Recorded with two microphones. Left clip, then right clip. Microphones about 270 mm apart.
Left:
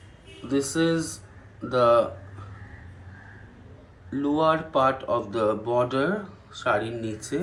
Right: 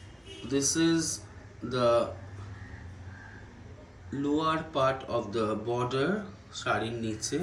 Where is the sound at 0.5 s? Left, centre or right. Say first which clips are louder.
Left 3 dB; centre.